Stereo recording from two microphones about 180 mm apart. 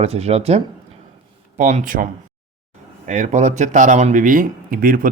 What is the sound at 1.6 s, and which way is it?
Speech, 45° right (ahead or behind).